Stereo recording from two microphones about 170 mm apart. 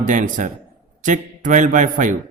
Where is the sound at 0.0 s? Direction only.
50° right (ahead or behind).